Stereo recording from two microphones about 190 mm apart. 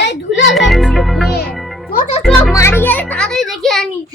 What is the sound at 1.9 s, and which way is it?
Speech, 45° left (ahead or behind).